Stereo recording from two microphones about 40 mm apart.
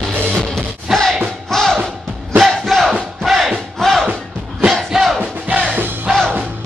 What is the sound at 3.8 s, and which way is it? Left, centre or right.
Music, centre.